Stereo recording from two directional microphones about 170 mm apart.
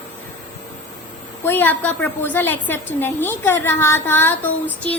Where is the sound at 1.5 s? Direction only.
10° left (ahead or behind).